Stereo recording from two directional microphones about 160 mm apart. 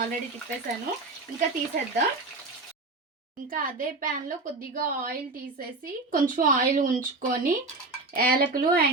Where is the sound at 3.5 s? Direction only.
60° right (ahead or behind).